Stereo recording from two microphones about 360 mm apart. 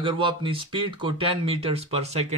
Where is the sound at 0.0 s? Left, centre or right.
Centre.